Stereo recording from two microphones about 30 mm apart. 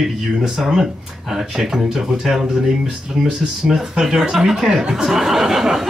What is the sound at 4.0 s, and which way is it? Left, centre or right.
Speech, centre.